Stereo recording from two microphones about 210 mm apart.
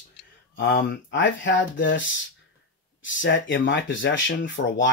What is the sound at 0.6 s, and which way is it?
Speech, 55° left (ahead or behind).